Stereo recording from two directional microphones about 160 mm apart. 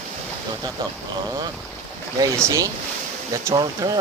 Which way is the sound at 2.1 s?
20° right (ahead or behind).